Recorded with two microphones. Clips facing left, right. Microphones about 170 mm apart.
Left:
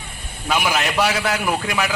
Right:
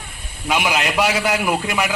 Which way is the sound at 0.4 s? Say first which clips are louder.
Right 1 dB; 15° right (ahead or behind).